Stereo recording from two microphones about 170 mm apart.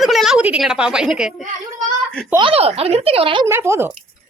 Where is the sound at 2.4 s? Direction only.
35° right (ahead or behind).